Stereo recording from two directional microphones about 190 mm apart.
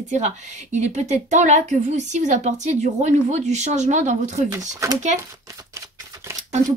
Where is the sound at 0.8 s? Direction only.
40° right (ahead or behind).